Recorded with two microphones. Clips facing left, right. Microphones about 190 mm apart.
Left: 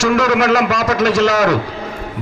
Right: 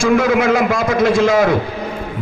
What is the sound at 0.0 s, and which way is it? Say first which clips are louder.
A man's voice: right 1 dB; 80° left.